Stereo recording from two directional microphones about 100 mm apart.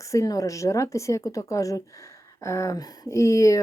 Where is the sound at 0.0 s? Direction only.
30° left (ahead or behind).